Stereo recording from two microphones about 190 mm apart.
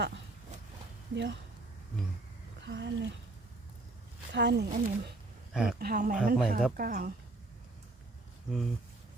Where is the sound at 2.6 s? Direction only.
65° right (ahead or behind).